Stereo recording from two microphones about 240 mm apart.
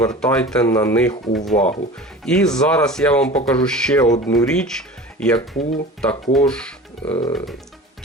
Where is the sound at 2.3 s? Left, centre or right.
Centre.